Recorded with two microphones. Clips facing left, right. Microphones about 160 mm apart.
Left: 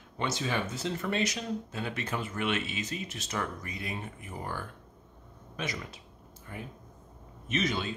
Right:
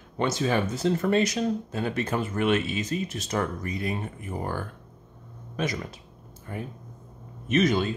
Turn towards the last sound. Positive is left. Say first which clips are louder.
# right 8 dB
turn(degrees=-45)  # may be behind; listen again after turning